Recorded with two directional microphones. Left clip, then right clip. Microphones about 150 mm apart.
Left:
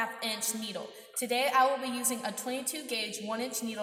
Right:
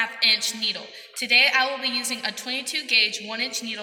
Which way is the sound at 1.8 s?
30° left (ahead or behind).